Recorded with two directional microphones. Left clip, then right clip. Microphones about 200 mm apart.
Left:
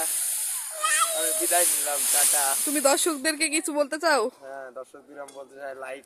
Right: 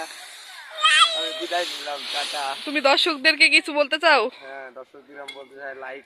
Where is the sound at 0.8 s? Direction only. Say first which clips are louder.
Right 9 dB; 55° left (ahead or behind).